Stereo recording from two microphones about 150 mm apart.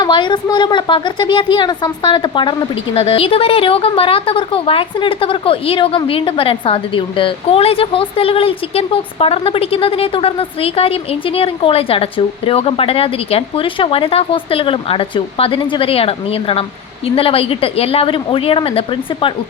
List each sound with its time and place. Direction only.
0.0 s a woman's voice: 30° left (ahead or behind)